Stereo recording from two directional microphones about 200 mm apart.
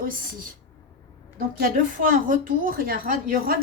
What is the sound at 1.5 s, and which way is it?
A woman's voice, 45° right (ahead or behind).